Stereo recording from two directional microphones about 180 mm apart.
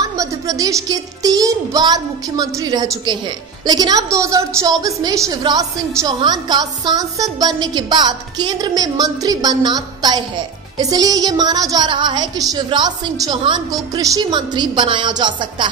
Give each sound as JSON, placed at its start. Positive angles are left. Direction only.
{"t": 0.0, "sound": "a woman's voice", "side_deg": -20}